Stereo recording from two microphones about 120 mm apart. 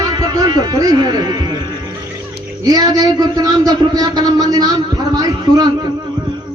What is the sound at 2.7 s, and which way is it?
A man's voice, 30° right (ahead or behind).